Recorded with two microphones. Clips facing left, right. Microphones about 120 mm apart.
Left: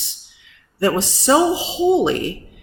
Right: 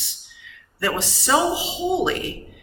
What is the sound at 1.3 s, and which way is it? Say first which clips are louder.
Speech: left 5 dB; 30° left (ahead or behind).